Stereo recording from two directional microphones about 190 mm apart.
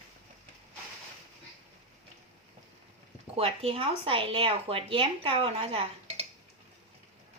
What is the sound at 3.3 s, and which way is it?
Speech, 30° right (ahead or behind).